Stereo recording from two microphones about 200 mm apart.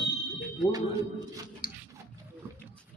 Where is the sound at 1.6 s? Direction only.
45° left (ahead or behind).